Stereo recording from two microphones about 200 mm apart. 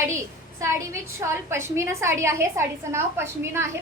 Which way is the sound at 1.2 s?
15° right (ahead or behind).